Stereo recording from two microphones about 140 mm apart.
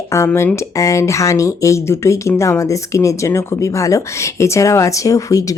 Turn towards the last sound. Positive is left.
turn(degrees=25)  # may be behind; listen again after turning